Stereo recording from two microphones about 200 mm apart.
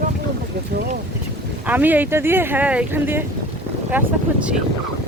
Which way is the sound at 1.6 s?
10° right (ahead or behind).